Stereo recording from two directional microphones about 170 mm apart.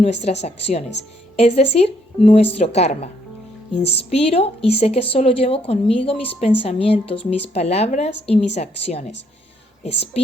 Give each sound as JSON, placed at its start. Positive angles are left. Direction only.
{"t": 0.0, "sound": "speech", "side_deg": 40}